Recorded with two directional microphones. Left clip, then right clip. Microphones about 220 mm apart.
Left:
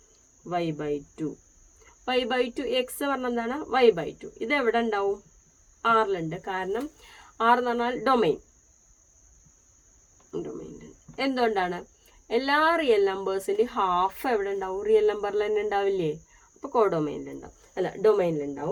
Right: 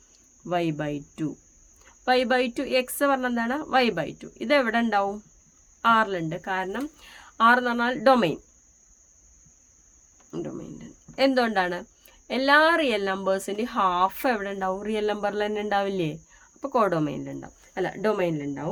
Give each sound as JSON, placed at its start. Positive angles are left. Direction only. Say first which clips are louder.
{"t": 0.4, "sound": "speech", "louder": "right 2 dB", "side_deg": -55}
{"t": 10.3, "sound": "cricket", "louder": "even", "side_deg": -50}
{"t": 12.3, "sound": "speech", "louder": "right 3 dB", "side_deg": -45}